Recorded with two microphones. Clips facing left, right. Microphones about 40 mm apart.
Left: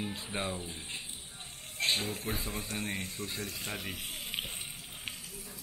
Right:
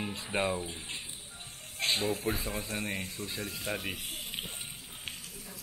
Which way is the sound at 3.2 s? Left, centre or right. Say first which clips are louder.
Even; right.